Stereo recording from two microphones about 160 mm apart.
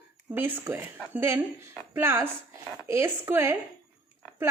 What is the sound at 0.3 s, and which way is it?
Speech, 15° right (ahead or behind).